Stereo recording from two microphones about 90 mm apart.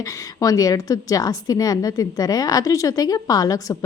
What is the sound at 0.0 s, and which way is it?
A woman's voice, 40° left (ahead or behind).